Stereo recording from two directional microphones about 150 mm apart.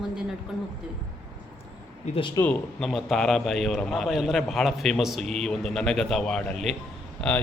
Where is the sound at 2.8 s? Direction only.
Centre (ahead or behind).